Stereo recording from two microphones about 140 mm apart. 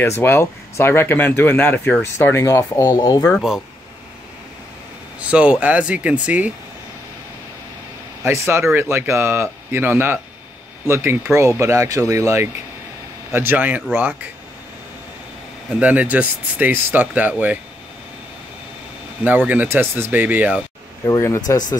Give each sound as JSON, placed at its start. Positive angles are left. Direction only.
{"t": 0.2, "sound": "speech", "side_deg": 15}
{"t": 5.3, "sound": "speech", "side_deg": -10}
{"t": 8.2, "sound": "speech", "side_deg": -15}
{"t": 15.8, "sound": "speech", "side_deg": -10}
{"t": 19.2, "sound": "speech", "side_deg": -10}
{"t": 21.0, "sound": "speech", "side_deg": 20}